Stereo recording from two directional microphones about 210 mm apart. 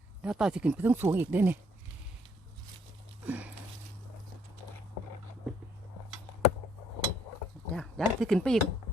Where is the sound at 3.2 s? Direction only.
5° right (ahead or behind).